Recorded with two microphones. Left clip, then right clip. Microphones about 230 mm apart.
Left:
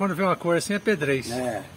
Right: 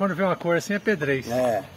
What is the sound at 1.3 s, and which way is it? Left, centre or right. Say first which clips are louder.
Speech: right 6 dB; right.